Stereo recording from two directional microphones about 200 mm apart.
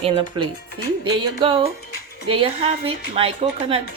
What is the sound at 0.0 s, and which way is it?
Speech, 25° right (ahead or behind).